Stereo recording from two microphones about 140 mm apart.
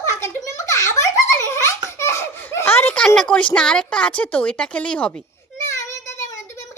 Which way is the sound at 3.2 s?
10° left (ahead or behind).